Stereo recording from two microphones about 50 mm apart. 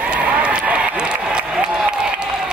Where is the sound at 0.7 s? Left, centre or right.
Right.